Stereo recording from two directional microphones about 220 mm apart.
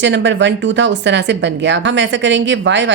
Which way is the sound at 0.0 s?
55° right (ahead or behind).